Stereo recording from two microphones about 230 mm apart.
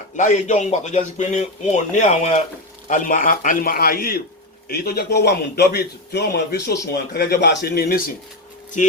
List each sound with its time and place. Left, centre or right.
0.2 s a man's voice: left
8.8 s speech: left